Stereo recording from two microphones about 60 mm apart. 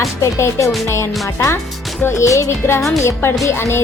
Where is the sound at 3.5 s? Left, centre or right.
Left.